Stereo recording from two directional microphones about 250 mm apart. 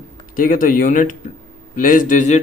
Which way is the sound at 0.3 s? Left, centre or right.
Left.